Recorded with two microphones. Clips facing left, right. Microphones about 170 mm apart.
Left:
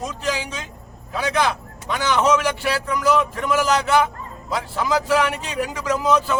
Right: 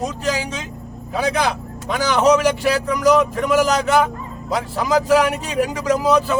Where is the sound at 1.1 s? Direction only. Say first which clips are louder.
Right 2 dB; 40° right (ahead or behind).